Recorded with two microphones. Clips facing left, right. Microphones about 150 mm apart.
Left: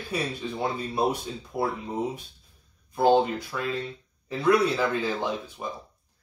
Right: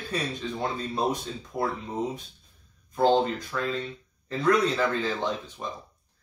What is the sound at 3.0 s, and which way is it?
Speech, 10° left (ahead or behind).